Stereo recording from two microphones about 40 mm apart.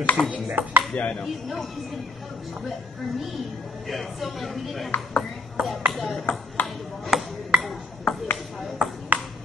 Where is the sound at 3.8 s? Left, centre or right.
Centre.